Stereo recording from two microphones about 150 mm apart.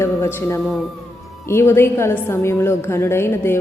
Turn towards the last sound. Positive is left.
turn(degrees=15)  # may be behind; listen again after turning